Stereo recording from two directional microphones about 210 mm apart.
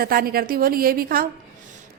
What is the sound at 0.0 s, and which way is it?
A woman's voice, 45° right (ahead or behind).